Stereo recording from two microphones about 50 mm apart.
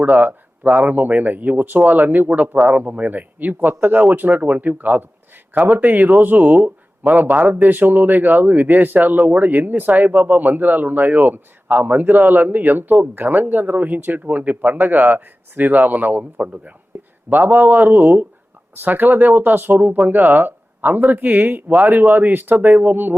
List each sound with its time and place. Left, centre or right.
0.0 s a man's voice: right